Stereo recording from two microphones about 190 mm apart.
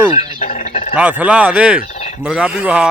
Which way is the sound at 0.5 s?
35° left (ahead or behind).